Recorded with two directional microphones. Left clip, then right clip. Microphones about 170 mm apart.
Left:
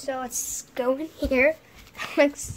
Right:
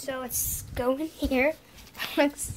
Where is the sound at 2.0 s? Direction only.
15° left (ahead or behind).